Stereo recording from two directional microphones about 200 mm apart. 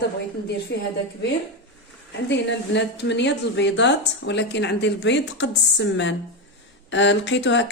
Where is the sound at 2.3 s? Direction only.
60° left (ahead or behind).